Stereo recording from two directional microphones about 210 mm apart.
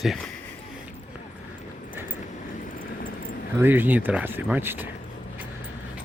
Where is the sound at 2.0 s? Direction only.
10° right (ahead or behind).